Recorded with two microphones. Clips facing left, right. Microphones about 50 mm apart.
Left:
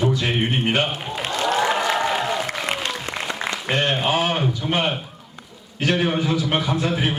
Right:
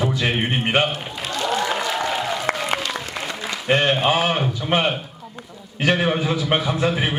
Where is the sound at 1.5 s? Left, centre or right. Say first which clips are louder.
Left 2 dB; left.